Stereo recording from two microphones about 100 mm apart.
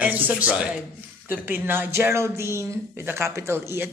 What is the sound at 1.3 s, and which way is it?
Speech, 20° right (ahead or behind).